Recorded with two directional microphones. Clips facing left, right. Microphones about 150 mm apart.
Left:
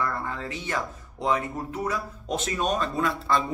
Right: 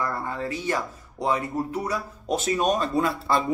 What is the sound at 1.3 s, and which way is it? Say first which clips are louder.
Speech: right 2 dB; 35° right (ahead or behind).